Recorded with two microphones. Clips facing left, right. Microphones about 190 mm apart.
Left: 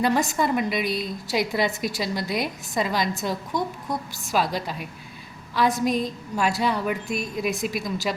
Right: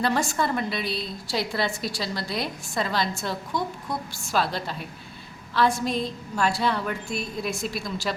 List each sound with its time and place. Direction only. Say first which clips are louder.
0.0 s a woman's voice: left 2 dB; 15° left (ahead or behind)
0.9 s a woman's voice: left 3 dB; 45° left (ahead or behind)
1.3 s a woman's voice: left 3 dB; 15° left (ahead or behind)
5.9 s a woman's voice: left 3 dB; 40° left (ahead or behind)
6.3 s a woman's voice: left 1 dB; 10° left (ahead or behind)